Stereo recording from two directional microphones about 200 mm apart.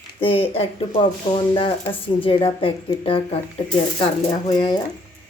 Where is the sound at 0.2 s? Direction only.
25° left (ahead or behind).